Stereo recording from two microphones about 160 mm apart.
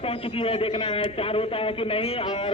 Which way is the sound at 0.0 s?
35° left (ahead or behind).